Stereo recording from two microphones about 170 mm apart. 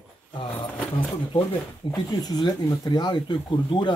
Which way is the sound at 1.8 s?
25° left (ahead or behind).